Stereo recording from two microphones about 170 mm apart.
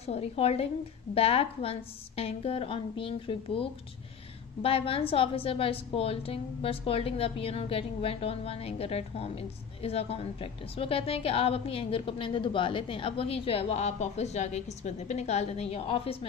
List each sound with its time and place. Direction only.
0.0 s a woman's voice: 35° left (ahead or behind)